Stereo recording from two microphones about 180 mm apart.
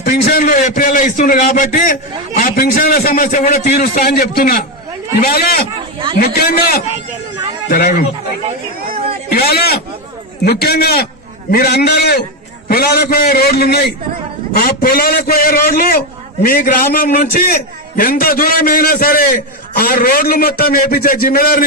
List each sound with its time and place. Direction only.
0.0 s a man's voice: 55° left (ahead or behind)
9.3 s a man's voice: 60° left (ahead or behind)